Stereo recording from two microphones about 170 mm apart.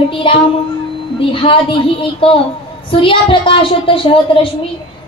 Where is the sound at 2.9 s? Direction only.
30° left (ahead or behind).